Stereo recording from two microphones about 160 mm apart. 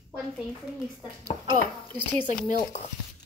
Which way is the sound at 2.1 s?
10° left (ahead or behind).